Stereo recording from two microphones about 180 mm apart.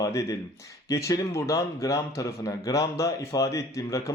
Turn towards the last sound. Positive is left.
turn(degrees=20)  # may be behind; listen again after turning